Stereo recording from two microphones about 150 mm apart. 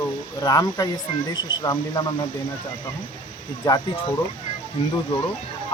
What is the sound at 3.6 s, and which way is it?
Speech, 25° left (ahead or behind).